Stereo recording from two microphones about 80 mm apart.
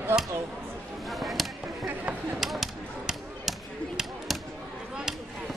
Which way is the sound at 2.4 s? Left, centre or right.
Centre.